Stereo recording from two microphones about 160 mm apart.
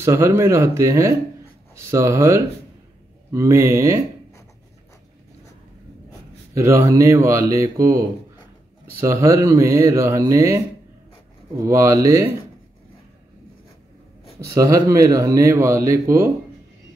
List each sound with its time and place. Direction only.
0.0 s speech: 15° right (ahead or behind)
6.5 s speech: 20° right (ahead or behind)
14.4 s speech: 20° right (ahead or behind)